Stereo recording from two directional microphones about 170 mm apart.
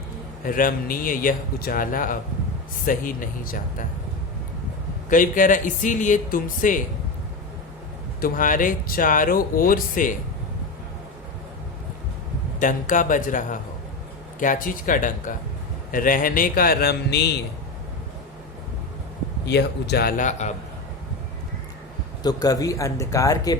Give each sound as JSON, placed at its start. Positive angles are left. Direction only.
{"t": 0.4, "sound": "speech", "side_deg": 55}
{"t": 5.0, "sound": "speech", "side_deg": 50}
{"t": 8.2, "sound": "speech", "side_deg": 50}
{"t": 12.5, "sound": "speech", "side_deg": 50}
{"t": 19.5, "sound": "speech", "side_deg": 75}
{"t": 22.2, "sound": "speech", "side_deg": 25}